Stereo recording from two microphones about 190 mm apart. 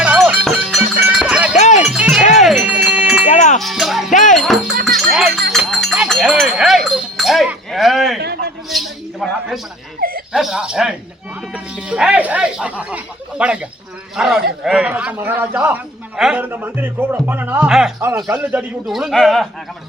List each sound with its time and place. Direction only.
0.0 s cowbell: 5° right (ahead or behind)
1.2 s sheep: 5° right (ahead or behind)
1.5 s music: 35° left (ahead or behind)
1.8 s wind chime: 5° right (ahead or behind)
3.2 s music: 40° left (ahead or behind)
3.6 s music: centre (ahead or behind)
4.1 s music: 40° left (ahead or behind)
4.4 s music: centre (ahead or behind)
4.9 s a sound: centre (ahead or behind)
8.2 s a sound: 60° right (ahead or behind)
8.7 s a sound: centre (ahead or behind)
10.0 s a sound: 50° right (ahead or behind)
10.3 s a man's voice: centre (ahead or behind)